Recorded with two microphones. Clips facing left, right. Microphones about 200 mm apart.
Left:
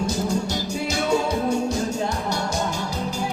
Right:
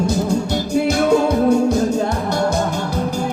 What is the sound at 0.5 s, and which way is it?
Music, 55° right (ahead or behind).